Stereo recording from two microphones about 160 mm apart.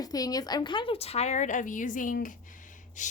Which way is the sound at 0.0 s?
25° left (ahead or behind).